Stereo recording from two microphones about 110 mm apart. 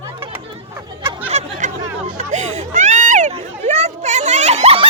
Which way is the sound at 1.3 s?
80° right.